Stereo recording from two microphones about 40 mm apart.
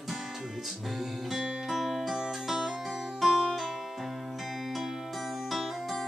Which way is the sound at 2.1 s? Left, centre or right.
Centre.